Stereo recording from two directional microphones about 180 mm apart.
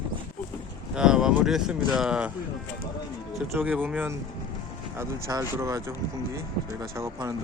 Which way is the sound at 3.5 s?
10° right (ahead or behind).